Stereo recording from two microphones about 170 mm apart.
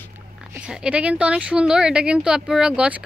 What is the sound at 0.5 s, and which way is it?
A woman's voice, 5° right (ahead or behind).